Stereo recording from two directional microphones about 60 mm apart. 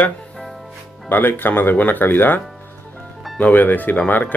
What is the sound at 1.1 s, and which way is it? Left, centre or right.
Speech, left.